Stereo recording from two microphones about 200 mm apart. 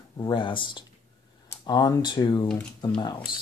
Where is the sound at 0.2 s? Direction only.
25° left (ahead or behind).